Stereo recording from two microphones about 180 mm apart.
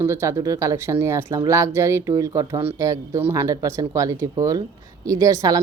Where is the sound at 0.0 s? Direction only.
15° right (ahead or behind).